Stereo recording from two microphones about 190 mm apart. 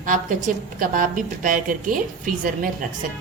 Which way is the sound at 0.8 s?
45° right (ahead or behind).